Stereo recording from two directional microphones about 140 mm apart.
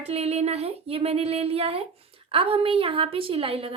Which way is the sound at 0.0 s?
50° right (ahead or behind).